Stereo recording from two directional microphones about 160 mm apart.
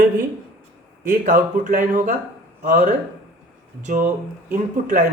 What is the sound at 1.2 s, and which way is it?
Speech, 55° right (ahead or behind).